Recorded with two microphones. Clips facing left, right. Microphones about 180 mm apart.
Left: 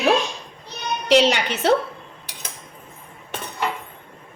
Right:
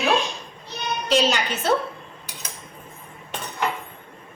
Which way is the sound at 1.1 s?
70° left (ahead or behind).